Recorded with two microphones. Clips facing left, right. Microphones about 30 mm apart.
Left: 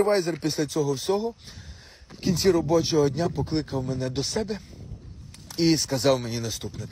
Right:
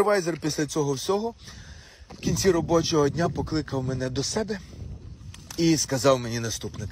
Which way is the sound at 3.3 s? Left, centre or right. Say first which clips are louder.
Left 1 dB; left.